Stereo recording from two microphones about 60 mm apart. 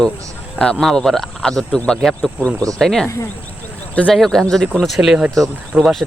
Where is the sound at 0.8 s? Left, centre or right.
Centre.